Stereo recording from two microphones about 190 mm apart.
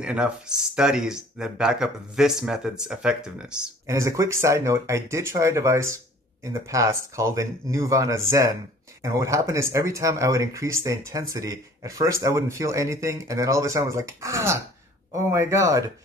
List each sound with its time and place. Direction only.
0.0 s speech: 5° right (ahead or behind)
3.8 s speech: 15° right (ahead or behind)